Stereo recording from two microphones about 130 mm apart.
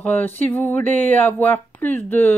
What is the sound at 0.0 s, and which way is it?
A woman's voice, 15° left (ahead or behind).